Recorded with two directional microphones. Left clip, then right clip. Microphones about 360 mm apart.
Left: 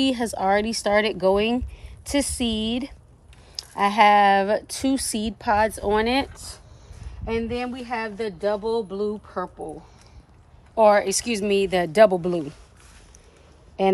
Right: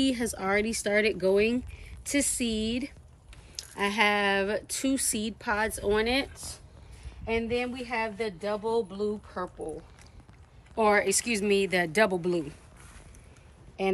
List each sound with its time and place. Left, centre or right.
0.0 s speech: centre
10.7 s speech: centre
13.8 s speech: left